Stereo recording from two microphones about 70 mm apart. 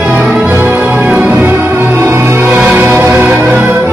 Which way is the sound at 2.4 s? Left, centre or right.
Right.